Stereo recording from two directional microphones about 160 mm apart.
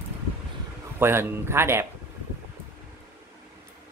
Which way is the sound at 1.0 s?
15° right (ahead or behind).